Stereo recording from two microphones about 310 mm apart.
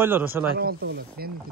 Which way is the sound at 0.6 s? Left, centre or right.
Right.